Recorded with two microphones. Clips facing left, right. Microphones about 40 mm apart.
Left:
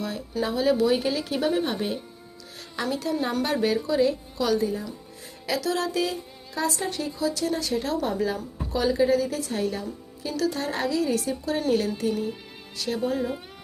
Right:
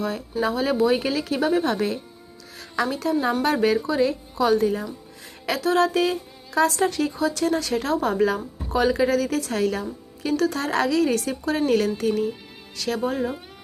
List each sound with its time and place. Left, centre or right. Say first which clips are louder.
0.4 s a woman's voice: right 1 dB; right
1.6 s a woman's voice: right 4 dB; right
2.9 s a woman's voice: right 2 dB; right
5.5 s a woman's voice: right 6 dB; right
7.5 s speech: right 3 dB; right
9.0 s speech: right 1 dB; right
9.8 s a woman's voice: right 4 dB; right